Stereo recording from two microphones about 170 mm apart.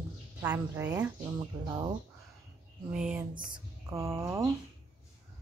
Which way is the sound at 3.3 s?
20° right (ahead or behind).